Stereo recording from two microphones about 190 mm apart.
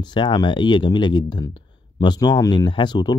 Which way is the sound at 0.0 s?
25° left (ahead or behind).